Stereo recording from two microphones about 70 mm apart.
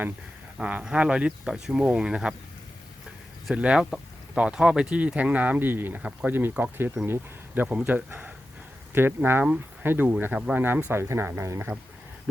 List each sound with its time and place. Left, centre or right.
0.6 s speech: centre
3.5 s speech: centre
6.0 s speech: centre
7.7 s speech: centre
7.9 s speech: right
10.3 s speech: centre
10.6 s speech: right
10.9 s speech: right